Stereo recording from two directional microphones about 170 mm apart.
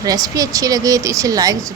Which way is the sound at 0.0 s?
20° right (ahead or behind).